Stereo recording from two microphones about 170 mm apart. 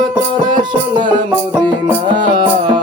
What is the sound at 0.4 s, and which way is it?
Music, 25° right (ahead or behind).